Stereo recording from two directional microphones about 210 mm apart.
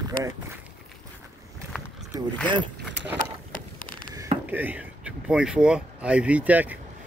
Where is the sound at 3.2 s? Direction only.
40° left (ahead or behind).